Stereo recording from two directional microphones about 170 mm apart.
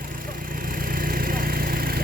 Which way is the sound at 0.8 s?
55° right (ahead or behind).